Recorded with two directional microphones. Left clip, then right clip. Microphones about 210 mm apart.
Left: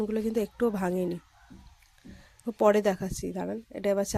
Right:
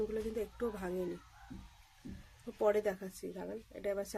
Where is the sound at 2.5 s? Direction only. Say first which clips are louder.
Left 9 dB; 45° left (ahead or behind).